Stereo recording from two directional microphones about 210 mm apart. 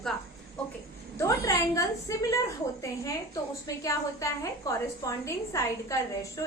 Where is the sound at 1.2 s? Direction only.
15° left (ahead or behind).